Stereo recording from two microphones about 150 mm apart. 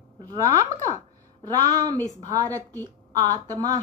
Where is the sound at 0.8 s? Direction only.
20° right (ahead or behind).